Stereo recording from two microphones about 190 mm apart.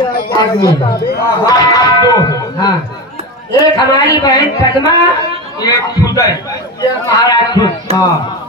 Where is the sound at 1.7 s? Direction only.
20° left (ahead or behind).